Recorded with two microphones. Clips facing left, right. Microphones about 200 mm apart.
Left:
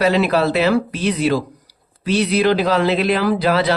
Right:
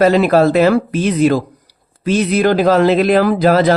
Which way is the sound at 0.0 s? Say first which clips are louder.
Right 5 dB; 45° right (ahead or behind).